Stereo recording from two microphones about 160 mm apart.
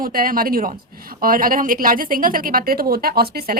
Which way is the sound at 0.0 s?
60° right (ahead or behind).